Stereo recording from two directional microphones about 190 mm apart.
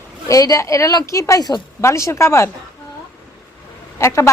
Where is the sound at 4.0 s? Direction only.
15° left (ahead or behind).